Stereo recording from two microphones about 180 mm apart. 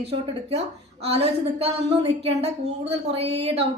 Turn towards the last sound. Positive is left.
turn(degrees=-35)  # may be behind; listen again after turning